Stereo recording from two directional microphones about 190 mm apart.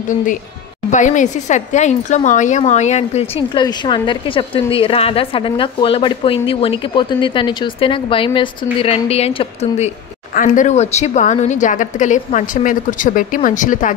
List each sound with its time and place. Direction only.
0.9 s a woman's voice: 40° left (ahead or behind)